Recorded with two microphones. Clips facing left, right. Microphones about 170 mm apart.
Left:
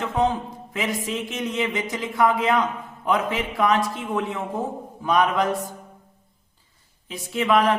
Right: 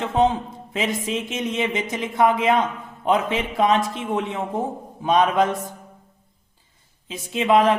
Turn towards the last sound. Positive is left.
turn(degrees=-20)  # may be behind; listen again after turning